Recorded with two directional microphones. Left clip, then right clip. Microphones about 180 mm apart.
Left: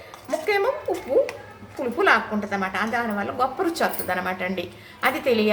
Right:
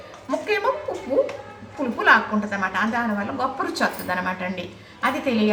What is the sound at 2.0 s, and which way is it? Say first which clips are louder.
A woman's voice: right 3 dB; 20° left (ahead or behind).